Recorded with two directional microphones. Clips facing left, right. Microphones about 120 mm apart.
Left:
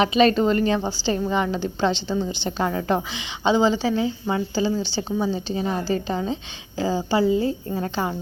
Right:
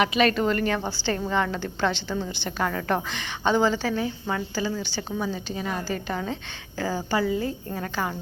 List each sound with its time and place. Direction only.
0.0 s a woman's voice: 25° left (ahead or behind)